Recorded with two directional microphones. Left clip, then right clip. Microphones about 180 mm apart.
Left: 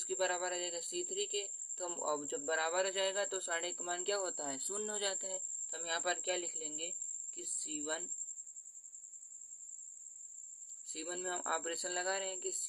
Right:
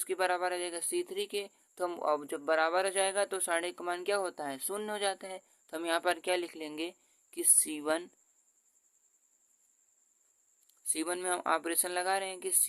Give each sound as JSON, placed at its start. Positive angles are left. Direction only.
{"t": 0.0, "sound": "speech", "side_deg": -40}
{"t": 10.8, "sound": "speech", "side_deg": -45}